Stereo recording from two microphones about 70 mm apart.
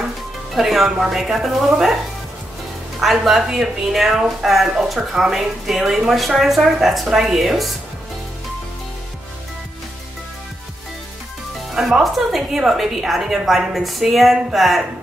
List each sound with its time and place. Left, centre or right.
0.6 s speech: centre
3.0 s speech: centre
11.7 s speech: centre